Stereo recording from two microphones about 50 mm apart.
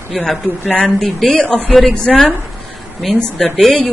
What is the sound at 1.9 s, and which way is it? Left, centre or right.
Speech, centre.